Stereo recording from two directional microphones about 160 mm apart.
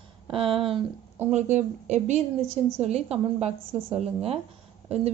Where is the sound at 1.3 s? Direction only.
45° right (ahead or behind).